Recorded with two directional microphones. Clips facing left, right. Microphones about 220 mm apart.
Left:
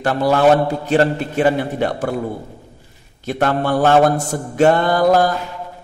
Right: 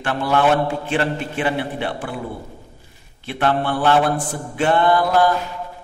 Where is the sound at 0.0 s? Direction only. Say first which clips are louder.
Left 4 dB; 40° left (ahead or behind).